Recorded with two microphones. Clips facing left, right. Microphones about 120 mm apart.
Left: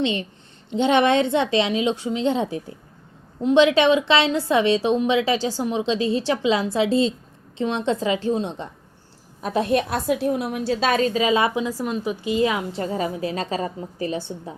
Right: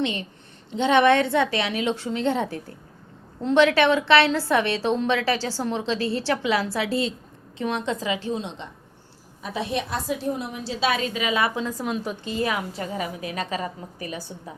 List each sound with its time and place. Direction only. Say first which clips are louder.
1.0 s a woman's voice: even; 20° left (ahead or behind); by 8.6 s 40° left (ahead or behind)
9.4 s a woman's voice: left 7 dB; 50° left (ahead or behind); by 11.5 s 25° left (ahead or behind)
11.5 s a woman's voice: left 3 dB; 10° left (ahead or behind); by 14.5 s 25° left (ahead or behind)